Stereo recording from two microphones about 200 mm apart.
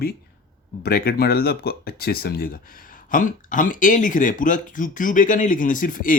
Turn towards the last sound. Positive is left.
turn(degrees=40)  # may be behind; listen again after turning